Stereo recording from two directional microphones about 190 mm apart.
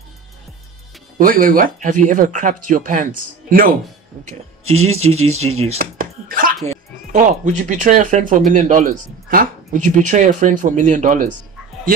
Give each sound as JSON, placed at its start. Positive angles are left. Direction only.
{"t": 1.1, "sound": "speech", "side_deg": -50}
{"t": 4.2, "sound": "speech", "side_deg": -35}
{"t": 5.8, "sound": "a sound", "side_deg": -45}
{"t": 7.1, "sound": "speech", "side_deg": -40}